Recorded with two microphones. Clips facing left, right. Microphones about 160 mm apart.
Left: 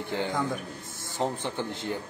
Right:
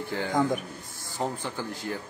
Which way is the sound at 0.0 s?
20° left (ahead or behind).